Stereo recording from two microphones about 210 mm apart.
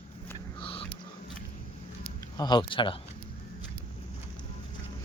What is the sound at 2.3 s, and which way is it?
Speech, 20° left (ahead or behind).